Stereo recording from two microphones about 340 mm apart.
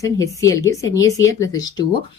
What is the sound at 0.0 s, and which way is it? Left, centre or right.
Speech, centre.